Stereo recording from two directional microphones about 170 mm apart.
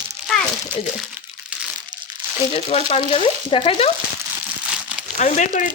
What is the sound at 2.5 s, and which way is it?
Speech, 35° left (ahead or behind).